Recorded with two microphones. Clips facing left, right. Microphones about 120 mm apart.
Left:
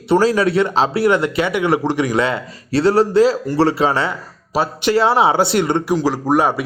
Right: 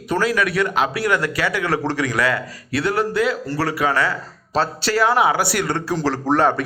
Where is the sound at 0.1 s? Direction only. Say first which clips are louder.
Left 6 dB; 30° left (ahead or behind).